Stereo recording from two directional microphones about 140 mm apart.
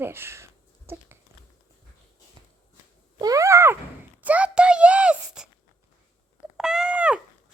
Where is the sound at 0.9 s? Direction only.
15° right (ahead or behind).